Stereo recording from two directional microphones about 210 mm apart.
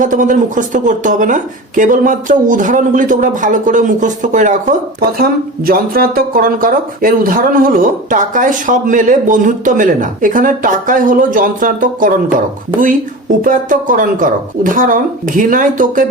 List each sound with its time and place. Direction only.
0.0 s speech: 40° right (ahead or behind)
13.4 s speech: 40° right (ahead or behind)